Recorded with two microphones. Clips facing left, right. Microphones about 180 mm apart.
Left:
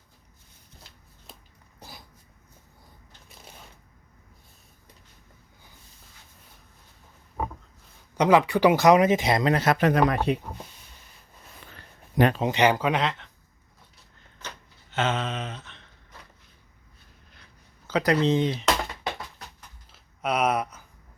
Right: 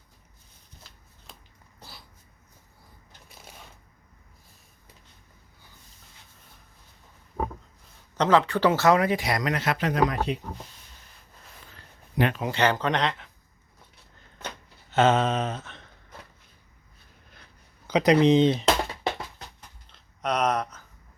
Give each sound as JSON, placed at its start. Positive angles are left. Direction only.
{"t": 8.1, "sound": "speech", "side_deg": 10}
{"t": 9.7, "sound": "speech", "side_deg": 55}
{"t": 12.1, "sound": "speech", "side_deg": 40}
{"t": 12.4, "sound": "speech", "side_deg": 15}
{"t": 14.9, "sound": "a sound", "side_deg": -40}
{"t": 17.8, "sound": "speech", "side_deg": -20}
{"t": 19.9, "sound": "a sound", "side_deg": 5}